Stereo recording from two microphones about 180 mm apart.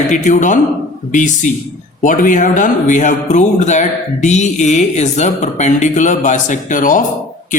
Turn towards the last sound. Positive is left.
turn(degrees=45)  # may be behind; listen again after turning